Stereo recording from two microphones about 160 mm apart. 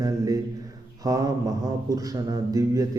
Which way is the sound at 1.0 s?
20° right (ahead or behind).